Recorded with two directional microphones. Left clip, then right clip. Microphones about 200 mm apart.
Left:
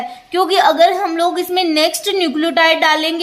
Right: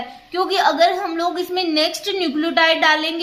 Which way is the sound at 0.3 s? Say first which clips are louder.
Left 5 dB; 40° left (ahead or behind).